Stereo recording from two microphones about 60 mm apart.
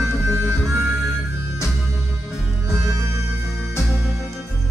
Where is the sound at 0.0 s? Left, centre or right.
Right.